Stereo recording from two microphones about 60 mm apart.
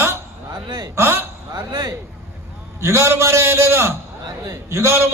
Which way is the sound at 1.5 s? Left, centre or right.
Right.